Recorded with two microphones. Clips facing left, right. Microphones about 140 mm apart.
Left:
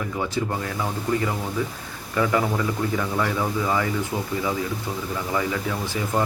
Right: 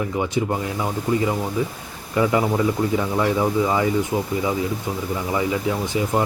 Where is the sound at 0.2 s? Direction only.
20° right (ahead or behind).